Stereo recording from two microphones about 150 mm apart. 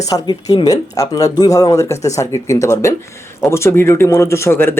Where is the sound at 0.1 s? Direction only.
25° left (ahead or behind).